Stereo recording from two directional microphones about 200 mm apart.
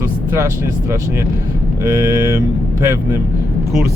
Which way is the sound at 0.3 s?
15° right (ahead or behind).